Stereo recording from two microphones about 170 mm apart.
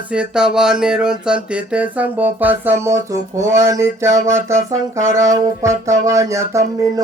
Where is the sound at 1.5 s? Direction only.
10° right (ahead or behind).